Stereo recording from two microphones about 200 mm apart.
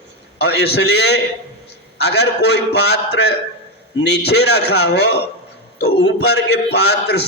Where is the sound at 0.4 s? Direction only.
55° left (ahead or behind).